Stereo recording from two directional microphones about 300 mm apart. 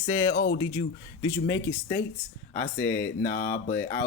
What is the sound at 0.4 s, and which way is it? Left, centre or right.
Speech, left.